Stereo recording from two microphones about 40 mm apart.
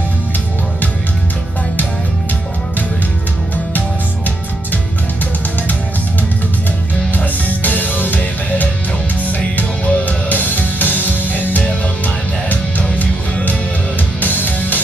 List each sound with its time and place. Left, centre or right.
7.1 s music: left
14.2 s music: left